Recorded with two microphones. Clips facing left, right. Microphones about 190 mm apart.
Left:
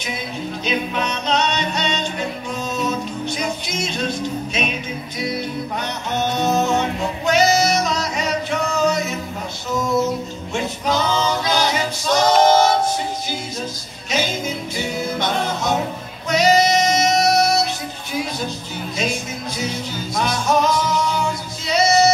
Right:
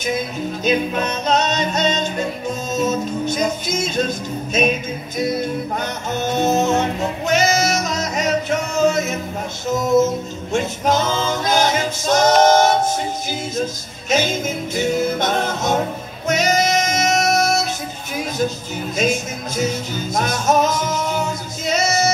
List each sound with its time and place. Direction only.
0.7 s music: 45° right (ahead or behind)
6.8 s music: 45° right (ahead or behind)
10.5 s music: 45° right (ahead or behind)
14.1 s music: 45° right (ahead or behind)
18.9 s speech: 45° right (ahead or behind)
20.2 s singing: 45° right (ahead or behind)